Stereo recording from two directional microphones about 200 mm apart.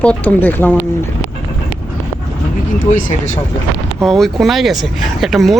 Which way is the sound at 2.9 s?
35° left (ahead or behind).